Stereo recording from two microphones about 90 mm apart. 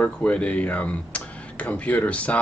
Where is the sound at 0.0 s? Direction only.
15° left (ahead or behind).